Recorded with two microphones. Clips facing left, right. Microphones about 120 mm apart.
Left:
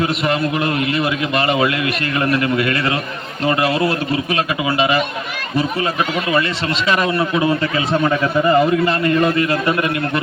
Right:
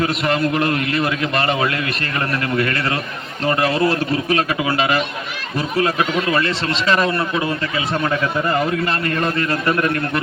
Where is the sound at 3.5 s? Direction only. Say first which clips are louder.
Even; 10° left (ahead or behind).